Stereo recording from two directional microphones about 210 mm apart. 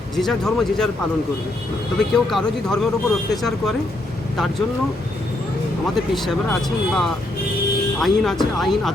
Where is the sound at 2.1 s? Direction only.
Centre (ahead or behind).